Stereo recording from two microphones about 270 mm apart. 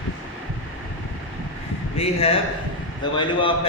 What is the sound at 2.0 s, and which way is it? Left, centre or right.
A man's voice, left.